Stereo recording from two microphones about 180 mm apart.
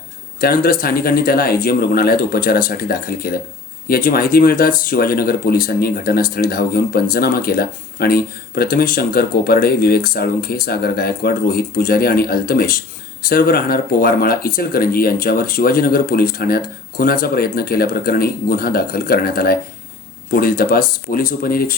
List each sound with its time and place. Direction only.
0.3 s speech: 55° left (ahead or behind)